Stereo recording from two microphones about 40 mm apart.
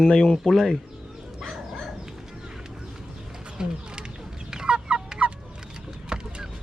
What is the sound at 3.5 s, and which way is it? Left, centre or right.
Bird, centre.